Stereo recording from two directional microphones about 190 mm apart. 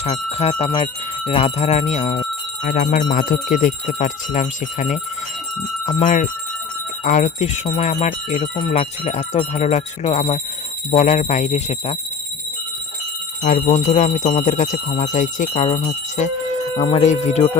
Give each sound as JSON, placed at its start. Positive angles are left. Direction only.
{"t": 0.0, "sound": "speech", "side_deg": 35}
{"t": 6.0, "sound": "speech", "side_deg": 40}
{"t": 13.4, "sound": "speech", "side_deg": 35}